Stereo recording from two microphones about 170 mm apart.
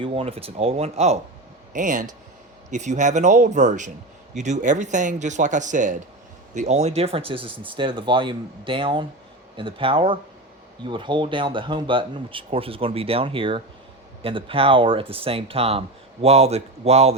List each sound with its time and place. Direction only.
0.0 s speech: 35° right (ahead or behind)